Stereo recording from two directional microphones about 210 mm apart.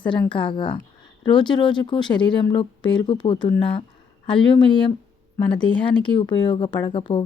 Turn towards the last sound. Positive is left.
turn(degrees=20)  # may be behind; listen again after turning